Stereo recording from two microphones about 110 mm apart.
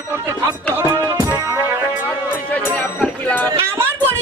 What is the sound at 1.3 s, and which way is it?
Music, 25° right (ahead or behind).